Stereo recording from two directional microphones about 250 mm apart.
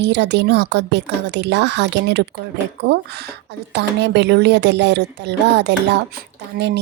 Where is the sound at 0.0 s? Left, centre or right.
Right.